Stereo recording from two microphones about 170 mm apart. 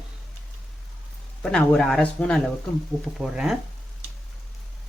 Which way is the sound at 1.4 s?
5° left (ahead or behind).